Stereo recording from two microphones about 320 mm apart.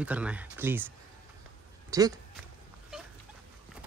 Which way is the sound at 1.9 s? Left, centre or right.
Centre.